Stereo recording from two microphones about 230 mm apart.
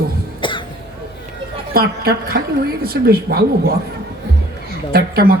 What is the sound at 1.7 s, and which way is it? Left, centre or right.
Speech, right.